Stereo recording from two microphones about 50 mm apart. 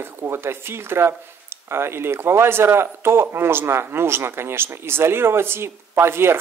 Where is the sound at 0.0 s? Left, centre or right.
Right.